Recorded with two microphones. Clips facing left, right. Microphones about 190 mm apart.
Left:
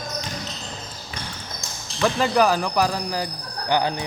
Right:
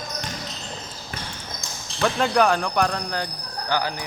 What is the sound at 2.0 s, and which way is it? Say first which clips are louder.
Speech: left 1 dB; centre (ahead or behind).